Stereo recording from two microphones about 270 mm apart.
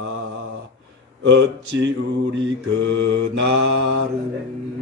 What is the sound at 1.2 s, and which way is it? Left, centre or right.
Speech, right.